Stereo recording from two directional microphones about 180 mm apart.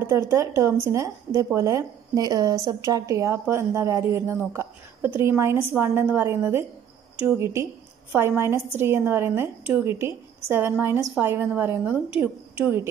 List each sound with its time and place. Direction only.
0.0 s a woman's voice: 15° right (ahead or behind)